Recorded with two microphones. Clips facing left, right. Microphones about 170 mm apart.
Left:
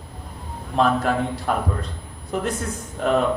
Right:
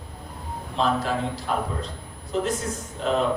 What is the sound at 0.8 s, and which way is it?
Speech, 55° left (ahead or behind).